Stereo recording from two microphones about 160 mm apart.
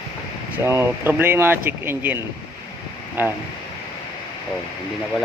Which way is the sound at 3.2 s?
10° right (ahead or behind).